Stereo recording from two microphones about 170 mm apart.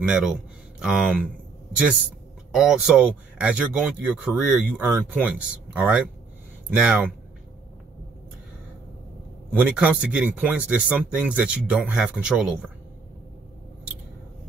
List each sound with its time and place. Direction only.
0.0 s speech: 5° right (ahead or behind)
2.5 s speech: 5° right (ahead or behind)
9.5 s speech: 10° right (ahead or behind)